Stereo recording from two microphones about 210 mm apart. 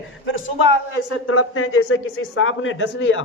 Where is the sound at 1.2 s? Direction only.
90° left; by 3.2 s 65° left (ahead or behind).